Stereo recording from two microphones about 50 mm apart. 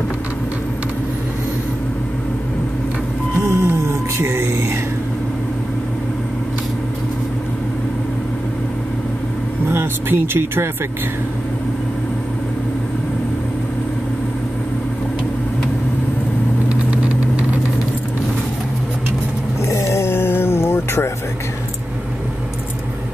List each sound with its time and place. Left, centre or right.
3.3 s music: right
9.7 s speech: right
16.6 s vehicle: right
19.7 s a sound: left